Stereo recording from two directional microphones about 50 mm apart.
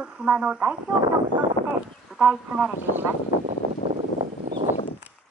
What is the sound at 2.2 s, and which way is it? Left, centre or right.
Speech, right.